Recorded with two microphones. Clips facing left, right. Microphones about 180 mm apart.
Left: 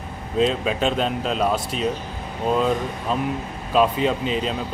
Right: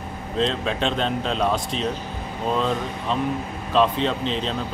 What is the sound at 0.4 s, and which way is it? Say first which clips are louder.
Speech: left 3 dB; 5° left (ahead or behind).